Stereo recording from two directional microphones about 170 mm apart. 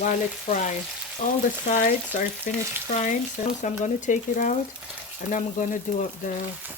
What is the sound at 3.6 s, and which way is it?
Speech, 45° left (ahead or behind).